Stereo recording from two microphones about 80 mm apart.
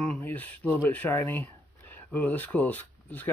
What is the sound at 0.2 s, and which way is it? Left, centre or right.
Speech, left.